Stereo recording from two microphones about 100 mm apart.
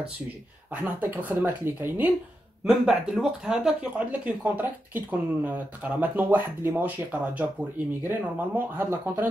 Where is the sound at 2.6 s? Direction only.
5° right (ahead or behind).